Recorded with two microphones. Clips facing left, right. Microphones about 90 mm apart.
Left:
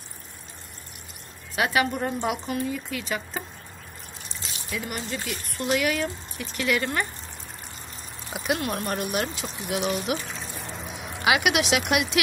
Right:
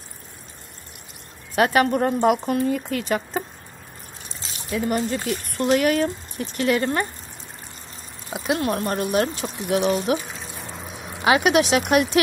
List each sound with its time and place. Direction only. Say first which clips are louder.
1.5 s speech: right 6 dB; 45° right (ahead or behind)
4.6 s speech: right 10 dB; 40° right (ahead or behind)
8.3 s speech: right 4 dB; 25° right (ahead or behind)
9.2 s speech: right 6 dB; 40° right (ahead or behind)
10.2 s water: even; 5° right (ahead or behind)
11.2 s speech: right 5 dB; 35° right (ahead or behind)